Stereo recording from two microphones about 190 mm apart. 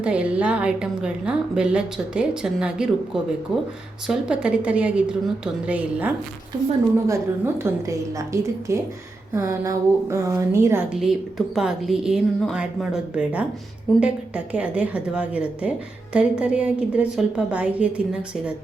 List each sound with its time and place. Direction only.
0.0 s a woman's voice: 5° right (ahead or behind)